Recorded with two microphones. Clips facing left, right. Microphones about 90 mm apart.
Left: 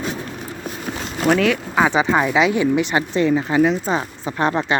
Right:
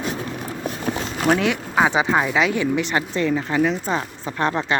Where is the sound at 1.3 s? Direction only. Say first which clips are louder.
Left 3 dB; 15° right (ahead or behind); by 2.4 s centre (ahead or behind).